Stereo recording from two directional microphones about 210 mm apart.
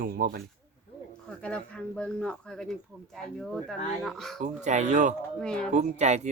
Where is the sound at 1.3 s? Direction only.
5° left (ahead or behind).